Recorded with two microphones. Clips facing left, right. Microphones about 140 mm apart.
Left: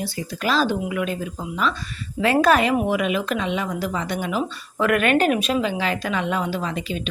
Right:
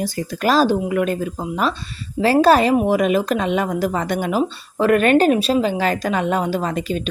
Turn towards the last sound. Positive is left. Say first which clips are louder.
# right 5 dB
turn(degrees=-45)  # may be behind; listen again after turning